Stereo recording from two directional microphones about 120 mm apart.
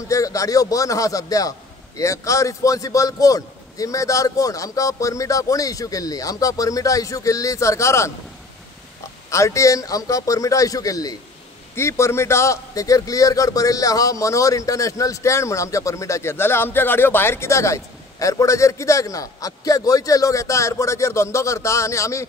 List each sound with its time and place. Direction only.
0.1 s a man's voice: 30° left (ahead or behind)
9.3 s a man's voice: 25° left (ahead or behind)